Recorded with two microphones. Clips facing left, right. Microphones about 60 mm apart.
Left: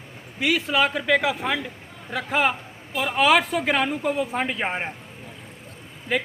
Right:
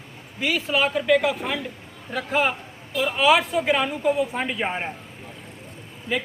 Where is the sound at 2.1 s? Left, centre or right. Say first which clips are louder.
Even; left.